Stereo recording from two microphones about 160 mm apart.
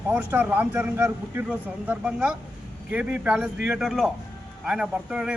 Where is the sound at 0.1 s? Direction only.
10° right (ahead or behind).